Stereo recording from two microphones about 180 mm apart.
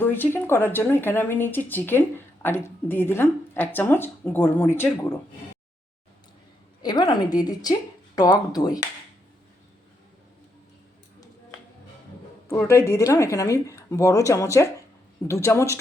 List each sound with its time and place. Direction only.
0.0 s speech: 10° left (ahead or behind)
6.8 s speech: 25° left (ahead or behind)
12.5 s speech: 15° left (ahead or behind)